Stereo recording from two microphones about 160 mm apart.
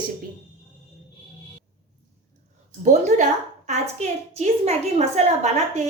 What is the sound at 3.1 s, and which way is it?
A woman's voice, 50° right (ahead or behind).